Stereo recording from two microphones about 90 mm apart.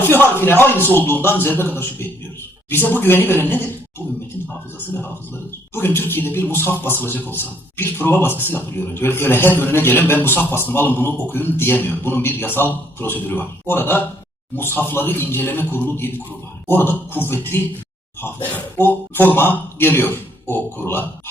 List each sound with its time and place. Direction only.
0.1 s a man's voice: 25° left (ahead or behind)
5.7 s a man's voice: 25° left (ahead or behind)
18.8 s a man's voice: 25° left (ahead or behind)